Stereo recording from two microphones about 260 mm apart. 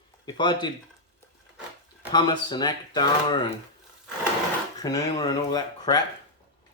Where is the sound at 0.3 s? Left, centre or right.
Centre.